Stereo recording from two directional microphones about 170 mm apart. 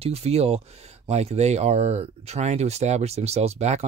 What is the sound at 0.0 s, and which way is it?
Speech, 35° right (ahead or behind).